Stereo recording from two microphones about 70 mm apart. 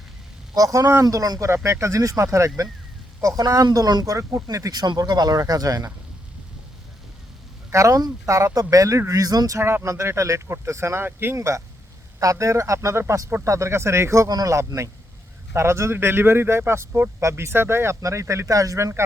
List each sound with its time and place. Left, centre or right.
0.5 s speech: right
1.0 s speech: right
1.5 s speech: right
3.2 s speech: right
4.4 s speech: right
4.8 s speech: right
7.7 s speech: right
8.5 s speech: right
9.6 s speech: right
11.3 s speech: right
14.3 s speech: right
15.5 s speech: right